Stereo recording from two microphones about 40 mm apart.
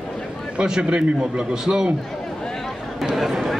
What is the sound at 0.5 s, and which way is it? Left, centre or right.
A man's voice, right.